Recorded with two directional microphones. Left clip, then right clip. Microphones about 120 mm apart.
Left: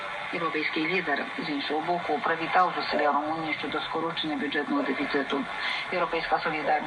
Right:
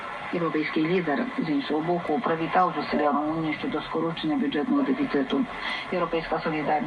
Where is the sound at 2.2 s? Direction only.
15° left (ahead or behind).